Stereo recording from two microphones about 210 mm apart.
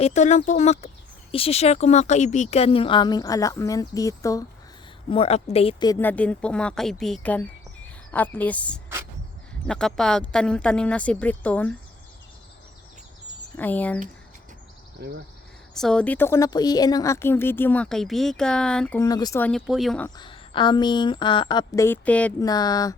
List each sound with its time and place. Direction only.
0.0 s speech: 35° left (ahead or behind); by 4.4 s 15° left (ahead or behind)
5.0 s speech: 25° left (ahead or behind)
6.0 s a woman's voice: 5° left (ahead or behind)
13.6 s a woman's voice: 10° left (ahead or behind)
15.7 s a woman's voice: centre (ahead or behind)
19.0 s a woman's voice: 15° left (ahead or behind)
19.5 s a woman's voice: centre (ahead or behind)
20.1 s speech: 25° left (ahead or behind); by 22.4 s 5° left (ahead or behind)
22.4 s a woman's voice: 20° left (ahead or behind)